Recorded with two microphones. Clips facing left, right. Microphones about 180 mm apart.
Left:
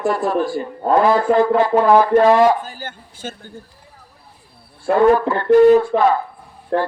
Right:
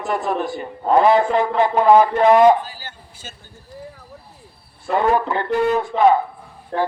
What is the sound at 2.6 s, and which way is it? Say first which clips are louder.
Speech: left 4 dB; 50° left (ahead or behind).